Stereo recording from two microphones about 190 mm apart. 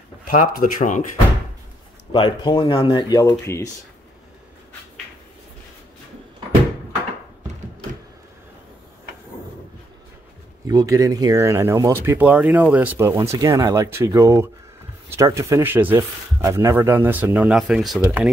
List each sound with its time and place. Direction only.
0.3 s speech: 45° left (ahead or behind)
2.1 s speech: 25° left (ahead or behind)
10.7 s speech: 20° right (ahead or behind); by 18.3 s centre (ahead or behind)